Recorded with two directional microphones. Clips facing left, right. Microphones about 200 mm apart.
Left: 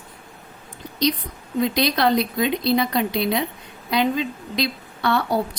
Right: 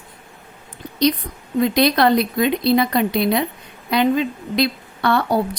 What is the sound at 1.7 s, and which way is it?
A woman's voice, 55° right (ahead or behind).